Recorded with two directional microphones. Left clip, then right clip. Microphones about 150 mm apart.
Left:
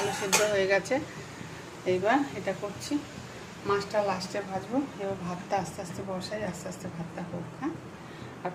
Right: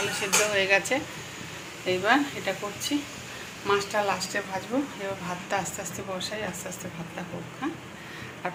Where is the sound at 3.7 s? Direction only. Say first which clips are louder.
Right 2 dB; 10° left (ahead or behind).